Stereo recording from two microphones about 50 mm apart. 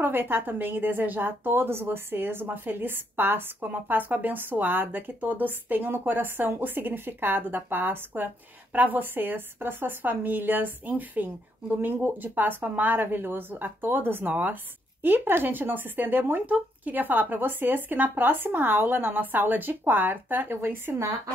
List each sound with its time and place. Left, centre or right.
0.0 s a woman's voice: right